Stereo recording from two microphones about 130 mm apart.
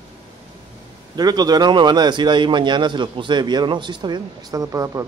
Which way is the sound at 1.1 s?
30° right (ahead or behind).